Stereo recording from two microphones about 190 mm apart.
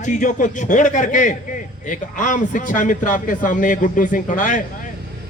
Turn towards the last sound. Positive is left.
turn(degrees=45)  # may be behind; listen again after turning